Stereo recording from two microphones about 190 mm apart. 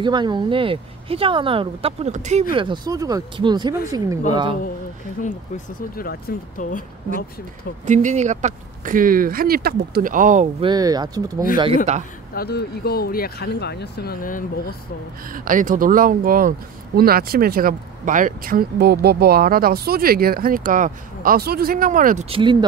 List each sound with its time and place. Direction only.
0.0 s speech: 25° right (ahead or behind)
2.5 s speech: 25° right (ahead or behind)
6.3 s speech: 50° left (ahead or behind)
7.8 s speech: 40° right (ahead or behind)
10.6 s speech: 20° right (ahead or behind)
11.5 s speech: 30° right (ahead or behind)
12.4 s speech: 55° left (ahead or behind)
15.3 s speech: 45° right (ahead or behind)
22.3 s speech: 25° right (ahead or behind)